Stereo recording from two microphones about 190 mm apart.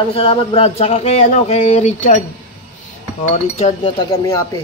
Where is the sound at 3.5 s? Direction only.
30° left (ahead or behind).